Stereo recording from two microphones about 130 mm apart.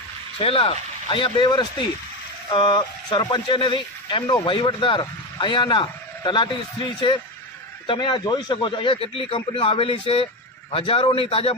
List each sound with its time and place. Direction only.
0.3 s a man's voice: 45° left (ahead or behind)